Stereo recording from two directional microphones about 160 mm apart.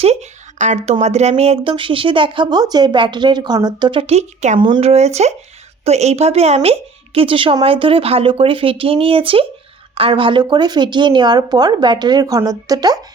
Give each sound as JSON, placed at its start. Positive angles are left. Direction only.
{"t": 0.0, "sound": "speech", "side_deg": -45}
{"t": 4.0, "sound": "a woman's voice", "side_deg": -45}
{"t": 4.6, "sound": "a woman's voice", "side_deg": -35}